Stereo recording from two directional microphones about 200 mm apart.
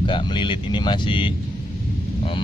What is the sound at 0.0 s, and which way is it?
A man's voice, 25° left (ahead or behind).